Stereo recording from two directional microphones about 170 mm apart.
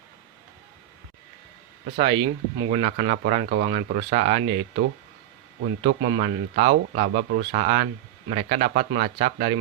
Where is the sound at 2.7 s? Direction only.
45° right (ahead or behind).